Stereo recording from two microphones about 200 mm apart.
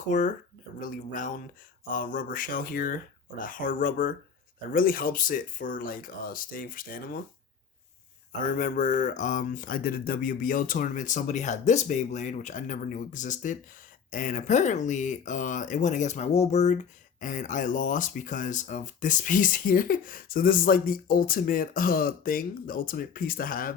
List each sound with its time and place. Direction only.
0.1 s speech: 40° left (ahead or behind)
8.4 s speech: 40° left (ahead or behind)